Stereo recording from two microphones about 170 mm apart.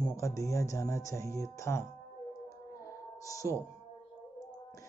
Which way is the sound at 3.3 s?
20° left (ahead or behind).